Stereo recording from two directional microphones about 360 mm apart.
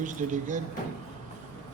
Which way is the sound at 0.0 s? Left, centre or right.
Right.